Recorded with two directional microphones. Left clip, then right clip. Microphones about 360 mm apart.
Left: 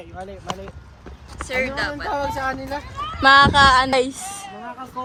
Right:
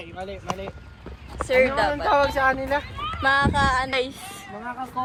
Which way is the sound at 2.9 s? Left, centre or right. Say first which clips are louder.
Left 10 dB; centre.